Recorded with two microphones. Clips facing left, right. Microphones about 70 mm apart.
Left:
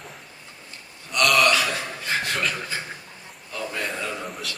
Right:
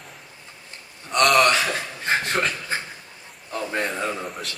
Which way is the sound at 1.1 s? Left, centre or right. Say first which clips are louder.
Right 2 dB; right.